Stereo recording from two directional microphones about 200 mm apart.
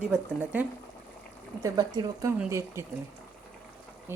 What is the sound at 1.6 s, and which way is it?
A woman's voice, 20° right (ahead or behind).